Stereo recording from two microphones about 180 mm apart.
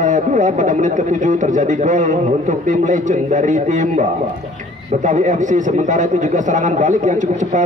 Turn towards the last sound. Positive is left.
turn(degrees=-45)  # may be behind; listen again after turning